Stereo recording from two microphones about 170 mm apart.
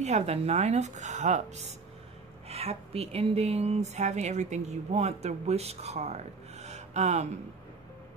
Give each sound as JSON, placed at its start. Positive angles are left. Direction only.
{"t": 0.0, "sound": "speech", "side_deg": -40}